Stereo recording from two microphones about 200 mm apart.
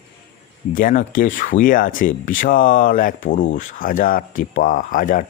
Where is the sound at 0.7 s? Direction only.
45° left (ahead or behind).